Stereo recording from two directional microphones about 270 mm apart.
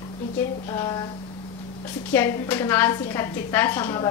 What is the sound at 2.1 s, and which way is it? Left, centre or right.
A woman's voice, centre.